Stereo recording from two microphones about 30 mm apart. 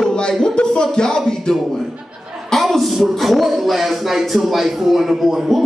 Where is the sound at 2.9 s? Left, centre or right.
Centre.